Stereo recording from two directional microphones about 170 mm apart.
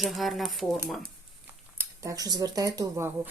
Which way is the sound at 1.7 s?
15° right (ahead or behind).